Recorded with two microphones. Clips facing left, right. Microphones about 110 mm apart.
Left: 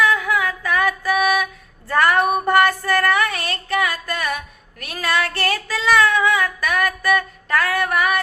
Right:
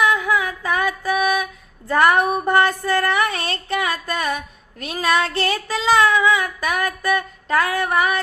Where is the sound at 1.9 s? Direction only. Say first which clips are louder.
Right 1 dB; 20° right (ahead or behind).